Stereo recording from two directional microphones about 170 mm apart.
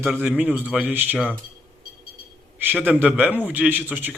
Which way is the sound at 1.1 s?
5° left (ahead or behind).